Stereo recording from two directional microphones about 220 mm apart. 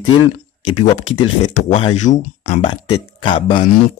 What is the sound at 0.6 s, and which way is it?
Speech, 90° left.